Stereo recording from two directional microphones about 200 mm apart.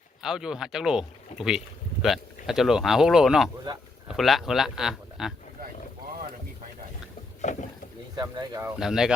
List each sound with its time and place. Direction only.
0.2 s speech: centre (ahead or behind)
7.4 s speech: 35° left (ahead or behind)
8.1 s speech: 20° right (ahead or behind)
8.8 s speech: 5° right (ahead or behind)